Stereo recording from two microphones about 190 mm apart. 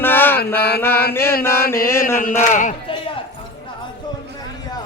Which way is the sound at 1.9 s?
15° left (ahead or behind).